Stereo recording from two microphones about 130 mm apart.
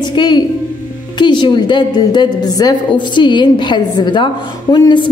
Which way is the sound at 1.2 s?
35° left (ahead or behind).